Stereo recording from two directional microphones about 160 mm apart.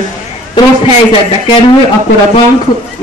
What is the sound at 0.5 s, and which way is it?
A man's voice, 30° left (ahead or behind).